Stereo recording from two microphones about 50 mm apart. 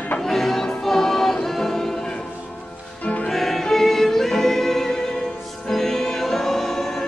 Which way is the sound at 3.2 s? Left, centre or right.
Centre.